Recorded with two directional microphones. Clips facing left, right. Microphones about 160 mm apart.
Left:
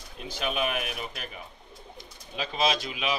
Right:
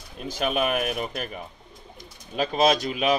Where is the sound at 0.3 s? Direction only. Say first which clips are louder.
Right 5 dB; 50° right (ahead or behind).